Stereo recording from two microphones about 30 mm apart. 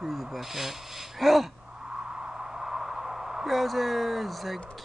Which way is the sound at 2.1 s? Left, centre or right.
Right.